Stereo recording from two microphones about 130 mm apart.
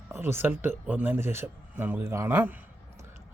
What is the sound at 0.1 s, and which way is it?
Speech, 15° right (ahead or behind).